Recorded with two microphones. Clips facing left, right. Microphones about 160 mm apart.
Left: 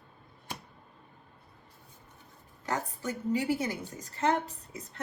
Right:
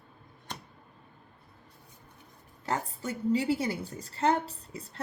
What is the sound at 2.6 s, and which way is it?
A woman's voice, 30° right (ahead or behind).